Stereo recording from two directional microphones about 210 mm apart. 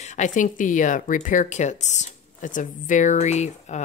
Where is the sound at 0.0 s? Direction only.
35° left (ahead or behind).